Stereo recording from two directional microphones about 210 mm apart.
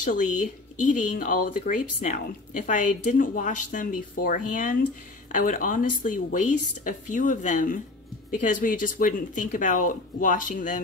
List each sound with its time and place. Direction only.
0.0 s speech: 40° left (ahead or behind)